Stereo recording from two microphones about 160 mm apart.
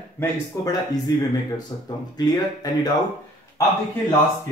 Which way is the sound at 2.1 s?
25° left (ahead or behind).